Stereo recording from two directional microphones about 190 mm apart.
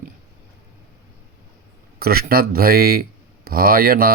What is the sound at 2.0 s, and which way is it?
Speech, 50° right (ahead or behind).